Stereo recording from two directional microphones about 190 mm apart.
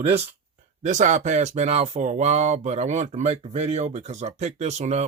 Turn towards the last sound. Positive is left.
turn(degrees=-35)  # may be behind; listen again after turning